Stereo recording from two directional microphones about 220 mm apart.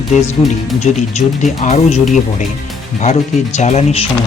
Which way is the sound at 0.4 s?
30° left (ahead or behind).